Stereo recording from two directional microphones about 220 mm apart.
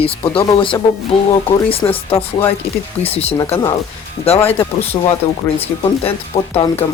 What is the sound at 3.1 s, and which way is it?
Speech, 25° left (ahead or behind).